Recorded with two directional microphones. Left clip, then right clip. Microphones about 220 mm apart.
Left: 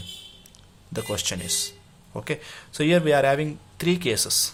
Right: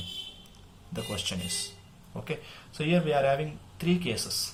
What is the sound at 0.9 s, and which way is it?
Speech, 35° left (ahead or behind).